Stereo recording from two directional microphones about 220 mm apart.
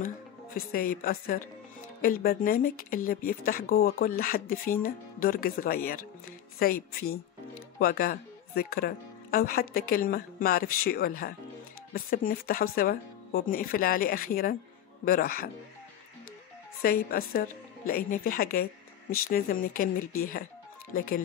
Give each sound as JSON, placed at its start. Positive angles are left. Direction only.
{"t": 0.6, "sound": "speech", "side_deg": 45}
{"t": 16.8, "sound": "speech", "side_deg": 45}